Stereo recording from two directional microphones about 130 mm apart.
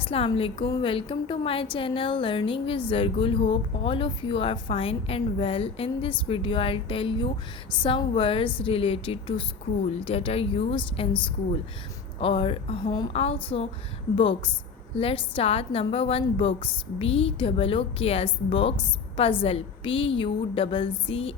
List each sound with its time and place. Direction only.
0.0 s a woman's voice: 45° left (ahead or behind)
12.2 s speech: 40° left (ahead or behind)
13.1 s a woman's voice: 50° left (ahead or behind)